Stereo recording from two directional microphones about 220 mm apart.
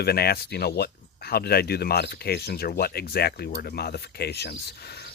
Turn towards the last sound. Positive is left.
turn(degrees=45)  # may be behind; listen again after turning